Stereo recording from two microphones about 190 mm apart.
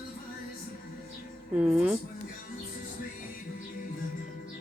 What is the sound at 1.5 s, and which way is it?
Speech, centre (ahead or behind).